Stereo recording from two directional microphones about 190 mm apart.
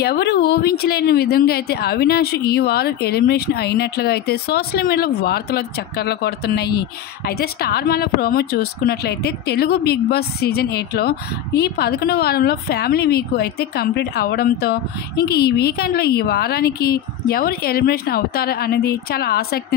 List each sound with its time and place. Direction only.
0.0 s speech: 60° left (ahead or behind)